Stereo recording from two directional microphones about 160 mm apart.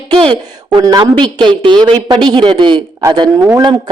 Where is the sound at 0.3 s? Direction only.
25° right (ahead or behind).